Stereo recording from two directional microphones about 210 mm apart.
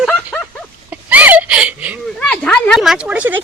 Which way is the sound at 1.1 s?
10° right (ahead or behind).